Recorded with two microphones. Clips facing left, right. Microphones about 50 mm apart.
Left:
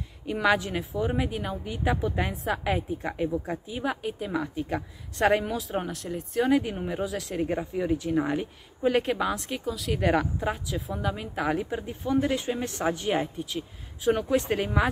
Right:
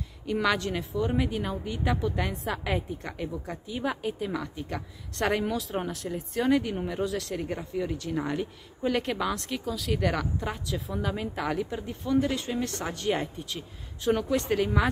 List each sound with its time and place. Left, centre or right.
0.3 s speech: centre
2.3 s speech: centre
4.3 s speech: centre
5.1 s speech: centre
7.4 s speech: centre
9.9 s speech: centre
11.5 s speech: centre